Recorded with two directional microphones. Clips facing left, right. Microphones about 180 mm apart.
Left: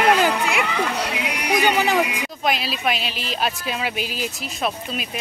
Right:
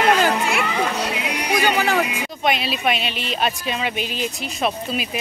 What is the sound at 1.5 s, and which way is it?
Speech, 15° left (ahead or behind).